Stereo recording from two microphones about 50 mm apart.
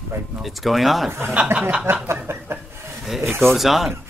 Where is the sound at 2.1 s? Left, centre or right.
Right.